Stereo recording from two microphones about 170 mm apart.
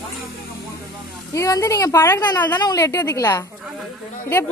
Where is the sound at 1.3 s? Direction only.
15° left (ahead or behind).